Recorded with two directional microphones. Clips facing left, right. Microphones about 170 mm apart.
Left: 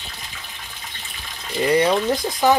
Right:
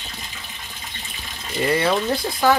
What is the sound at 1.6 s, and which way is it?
Speech, 15° left (ahead or behind).